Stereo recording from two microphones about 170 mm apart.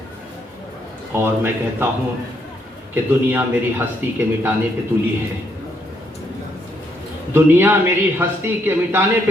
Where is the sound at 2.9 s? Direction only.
10° right (ahead or behind).